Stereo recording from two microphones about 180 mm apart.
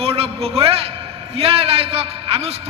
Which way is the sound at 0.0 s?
30° right (ahead or behind).